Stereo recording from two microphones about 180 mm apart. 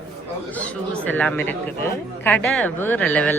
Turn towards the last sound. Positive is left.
turn(degrees=10)  # may be behind; listen again after turning